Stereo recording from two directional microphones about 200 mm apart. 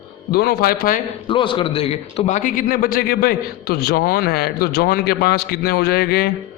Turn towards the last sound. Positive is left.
turn(degrees=55)  # may be behind; listen again after turning